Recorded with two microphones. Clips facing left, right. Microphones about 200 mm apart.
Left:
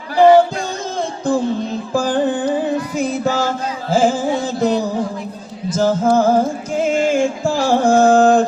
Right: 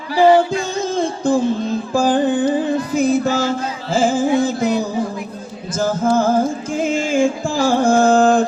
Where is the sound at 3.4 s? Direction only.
50° left (ahead or behind).